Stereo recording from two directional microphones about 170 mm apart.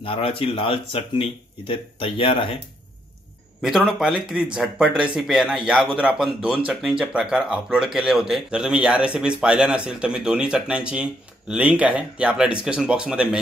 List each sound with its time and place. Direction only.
0.0 s speech: 35° left (ahead or behind)
3.6 s speech: 5° right (ahead or behind)